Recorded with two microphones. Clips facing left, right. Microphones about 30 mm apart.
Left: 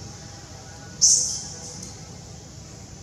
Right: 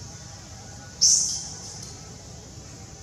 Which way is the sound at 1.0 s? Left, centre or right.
Right.